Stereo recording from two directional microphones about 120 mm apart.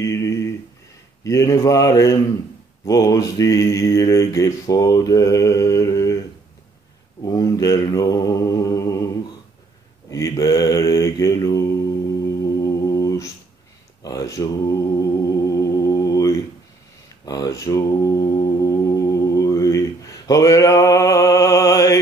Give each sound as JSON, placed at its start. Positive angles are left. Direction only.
{"t": 0.0, "sound": "a sound", "side_deg": 25}
{"t": 1.2, "sound": "mantra", "side_deg": 25}
{"t": 7.2, "sound": "mantra", "side_deg": 30}
{"t": 10.1, "sound": "mantra", "side_deg": 30}